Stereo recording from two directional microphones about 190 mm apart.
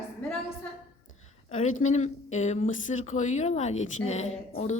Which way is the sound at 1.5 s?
40° left (ahead or behind).